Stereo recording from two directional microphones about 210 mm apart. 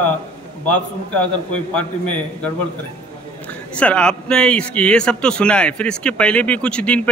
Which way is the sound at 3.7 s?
5° left (ahead or behind).